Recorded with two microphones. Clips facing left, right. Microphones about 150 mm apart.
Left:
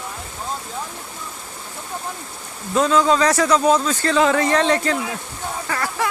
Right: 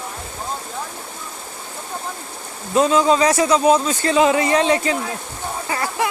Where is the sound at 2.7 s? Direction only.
15° right (ahead or behind).